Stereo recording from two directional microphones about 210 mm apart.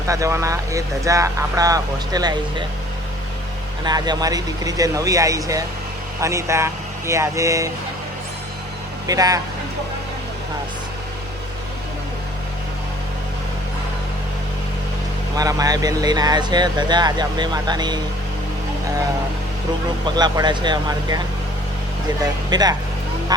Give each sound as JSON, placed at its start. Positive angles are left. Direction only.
{"t": 0.1, "sound": "speech", "side_deg": -15}
{"t": 3.8, "sound": "speech", "side_deg": -20}
{"t": 9.0, "sound": "speech", "side_deg": -15}
{"t": 15.4, "sound": "speech", "side_deg": -15}
{"t": 20.1, "sound": "speech", "side_deg": -20}
{"t": 22.4, "sound": "speech", "side_deg": -20}